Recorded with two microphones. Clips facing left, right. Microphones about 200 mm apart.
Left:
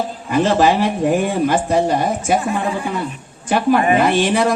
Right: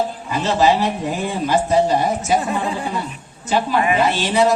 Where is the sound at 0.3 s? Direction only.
50° left (ahead or behind).